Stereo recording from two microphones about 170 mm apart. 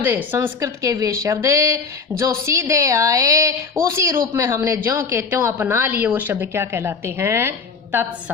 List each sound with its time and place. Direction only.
0.0 s a woman's voice: 10° right (ahead or behind)